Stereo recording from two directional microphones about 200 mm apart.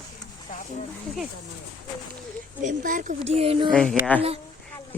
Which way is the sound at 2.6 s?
40° right (ahead or behind).